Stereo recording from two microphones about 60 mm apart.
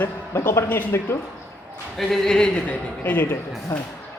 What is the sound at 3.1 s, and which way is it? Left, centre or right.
Speech, left.